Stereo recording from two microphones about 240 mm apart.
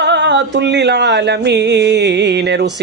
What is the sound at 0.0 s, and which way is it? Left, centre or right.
Speech, right.